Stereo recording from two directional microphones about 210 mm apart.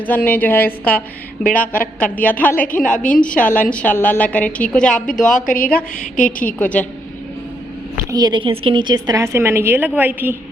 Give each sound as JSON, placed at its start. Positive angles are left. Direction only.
{"t": 0.0, "sound": "a woman's voice", "side_deg": 10}
{"t": 5.5, "sound": "a woman's voice", "side_deg": 45}
{"t": 6.6, "sound": "a woman's voice", "side_deg": 5}
{"t": 8.1, "sound": "a woman's voice", "side_deg": -20}